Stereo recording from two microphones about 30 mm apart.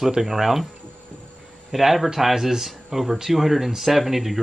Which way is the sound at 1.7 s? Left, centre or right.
Centre.